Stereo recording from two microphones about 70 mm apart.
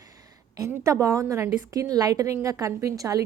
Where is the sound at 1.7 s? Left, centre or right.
Right.